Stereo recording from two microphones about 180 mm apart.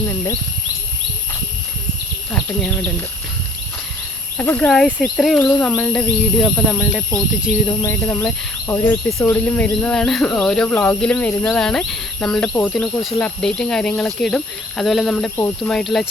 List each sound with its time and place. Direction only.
2.3 s speech: 5° left (ahead or behind)
4.4 s speech: 10° left (ahead or behind)
7.8 s speech: 10° left (ahead or behind)